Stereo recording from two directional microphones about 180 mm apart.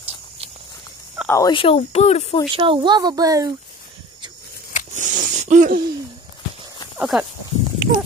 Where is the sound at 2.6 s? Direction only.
25° right (ahead or behind).